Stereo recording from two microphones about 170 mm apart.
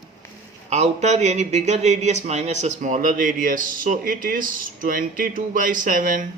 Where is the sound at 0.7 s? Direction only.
40° right (ahead or behind).